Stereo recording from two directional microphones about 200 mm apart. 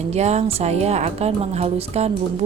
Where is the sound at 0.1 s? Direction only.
35° right (ahead or behind).